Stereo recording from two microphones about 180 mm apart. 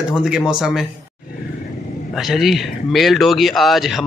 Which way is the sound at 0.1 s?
5° right (ahead or behind).